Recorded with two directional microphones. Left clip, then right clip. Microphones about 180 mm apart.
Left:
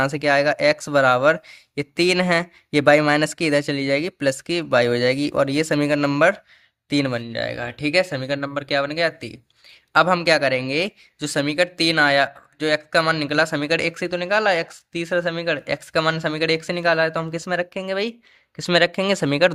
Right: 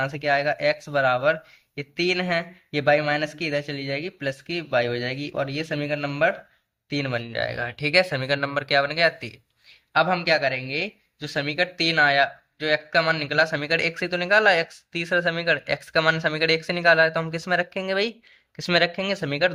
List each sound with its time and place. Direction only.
0.0 s speech: 35° left (ahead or behind)
6.9 s speech: 30° left (ahead or behind)
9.9 s speech: 40° left (ahead or behind)